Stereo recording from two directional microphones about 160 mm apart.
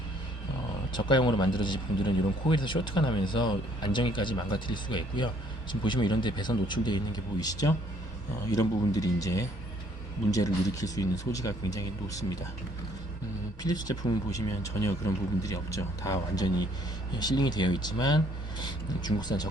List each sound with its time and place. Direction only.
0.9 s speech: 30° left (ahead or behind)
13.6 s speech: 25° left (ahead or behind)